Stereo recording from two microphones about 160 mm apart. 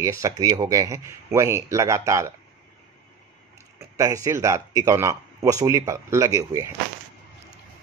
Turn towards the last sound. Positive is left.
turn(degrees=-20)  # may be behind; listen again after turning